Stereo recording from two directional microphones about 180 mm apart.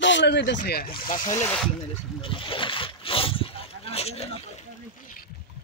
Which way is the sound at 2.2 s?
30° left (ahead or behind).